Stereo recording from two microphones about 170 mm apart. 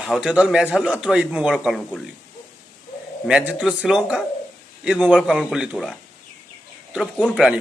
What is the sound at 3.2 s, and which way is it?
A man's voice, 10° right (ahead or behind).